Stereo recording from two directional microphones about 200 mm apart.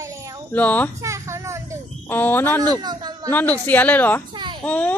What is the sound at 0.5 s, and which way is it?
Speech, 10° left (ahead or behind).